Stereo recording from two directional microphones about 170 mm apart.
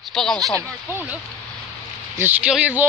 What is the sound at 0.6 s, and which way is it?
Speech, 15° right (ahead or behind).